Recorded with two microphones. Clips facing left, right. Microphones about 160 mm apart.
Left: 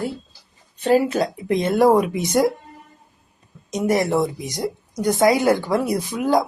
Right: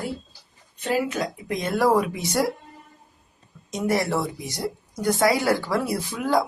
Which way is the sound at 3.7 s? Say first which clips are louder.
Left 4 dB; 20° left (ahead or behind).